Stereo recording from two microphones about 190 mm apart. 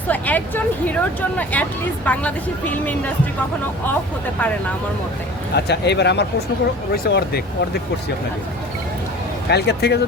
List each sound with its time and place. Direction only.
0.1 s speech: 10° left (ahead or behind)
5.5 s speech: 60° left (ahead or behind)
9.5 s speech: 60° left (ahead or behind)